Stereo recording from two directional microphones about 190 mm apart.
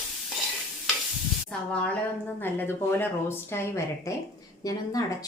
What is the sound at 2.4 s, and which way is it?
Speech, 10° left (ahead or behind).